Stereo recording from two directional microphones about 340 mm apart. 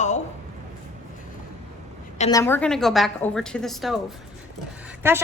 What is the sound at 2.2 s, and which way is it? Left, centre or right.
A woman's voice, centre.